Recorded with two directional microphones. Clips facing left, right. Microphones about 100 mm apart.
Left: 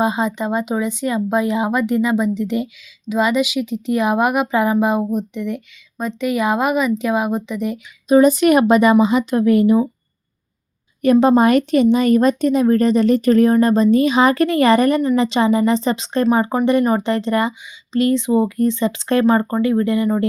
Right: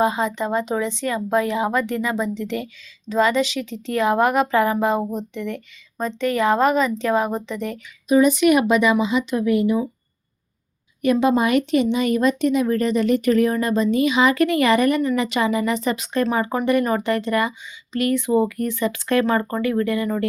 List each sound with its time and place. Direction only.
0.0 s speech: 20° left (ahead or behind)
8.0 s speech: 35° left (ahead or behind)
11.0 s speech: 40° left (ahead or behind); by 20.2 s 25° left (ahead or behind)